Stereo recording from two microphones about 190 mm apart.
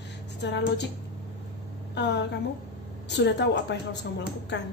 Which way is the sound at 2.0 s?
65° left (ahead or behind).